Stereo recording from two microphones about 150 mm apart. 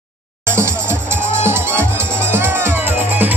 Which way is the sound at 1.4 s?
15° right (ahead or behind).